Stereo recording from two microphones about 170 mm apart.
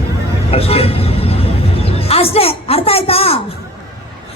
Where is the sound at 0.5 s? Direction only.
35° left (ahead or behind).